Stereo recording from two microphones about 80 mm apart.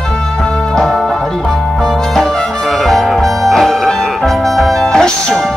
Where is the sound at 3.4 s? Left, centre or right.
Centre.